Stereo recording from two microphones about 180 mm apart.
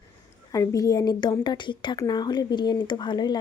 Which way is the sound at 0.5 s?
20° left (ahead or behind).